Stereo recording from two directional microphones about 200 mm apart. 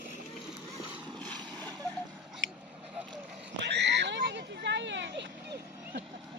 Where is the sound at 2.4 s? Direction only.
70° right (ahead or behind).